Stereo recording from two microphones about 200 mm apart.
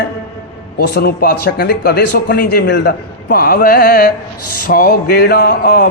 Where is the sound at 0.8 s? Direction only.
50° left (ahead or behind).